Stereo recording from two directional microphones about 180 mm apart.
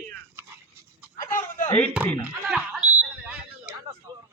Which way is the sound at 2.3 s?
5° right (ahead or behind).